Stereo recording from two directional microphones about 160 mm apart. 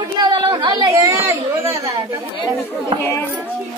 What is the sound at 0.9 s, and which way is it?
A child's voice, 15° right (ahead or behind).